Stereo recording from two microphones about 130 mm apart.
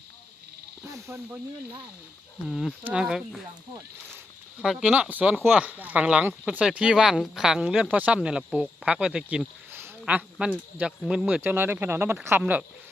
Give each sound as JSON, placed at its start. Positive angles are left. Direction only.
{"t": 0.9, "sound": "speech", "side_deg": -25}
{"t": 2.5, "sound": "speech", "side_deg": 0}
{"t": 4.6, "sound": "speech", "side_deg": -5}